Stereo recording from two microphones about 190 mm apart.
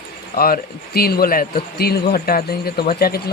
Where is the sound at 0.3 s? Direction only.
50° left (ahead or behind).